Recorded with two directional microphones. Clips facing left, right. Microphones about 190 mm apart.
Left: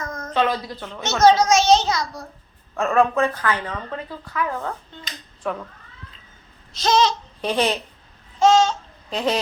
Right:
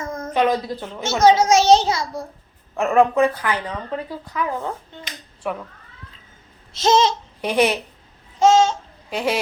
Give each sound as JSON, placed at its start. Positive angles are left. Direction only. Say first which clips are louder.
{"t": 0.0, "sound": "a sound", "louder": "right 3 dB", "side_deg": -30}
{"t": 0.3, "sound": "a child's voice", "louder": "right 3 dB", "side_deg": -15}
{"t": 1.4, "sound": "a child's voice", "louder": "right 2 dB", "side_deg": -30}
{"t": 6.7, "sound": "a child's voice", "louder": "right 2 dB", "side_deg": -25}
{"t": 7.4, "sound": "a woman's voice", "louder": "right 3 dB", "side_deg": -10}
{"t": 8.4, "sound": "babbling", "louder": "right 1 dB", "side_deg": -15}